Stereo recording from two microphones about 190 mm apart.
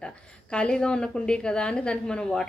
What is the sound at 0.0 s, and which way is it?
A woman's voice, 5° left (ahead or behind).